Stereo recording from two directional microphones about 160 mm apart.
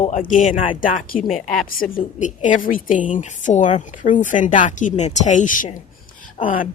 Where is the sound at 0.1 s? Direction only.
55° left (ahead or behind).